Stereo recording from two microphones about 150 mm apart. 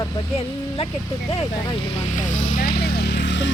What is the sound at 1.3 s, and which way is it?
Speech, 35° left (ahead or behind).